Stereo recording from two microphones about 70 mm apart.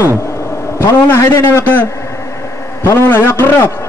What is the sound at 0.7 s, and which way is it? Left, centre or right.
Speech, left.